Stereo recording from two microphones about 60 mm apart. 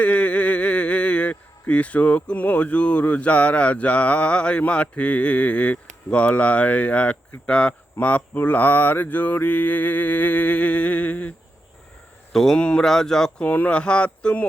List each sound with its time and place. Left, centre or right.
0.0 s speech: left
12.3 s speech: centre
12.5 s speech: centre
12.8 s speech: centre
13.4 s speech: left